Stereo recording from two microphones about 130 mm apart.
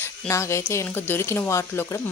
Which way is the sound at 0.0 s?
20° left (ahead or behind).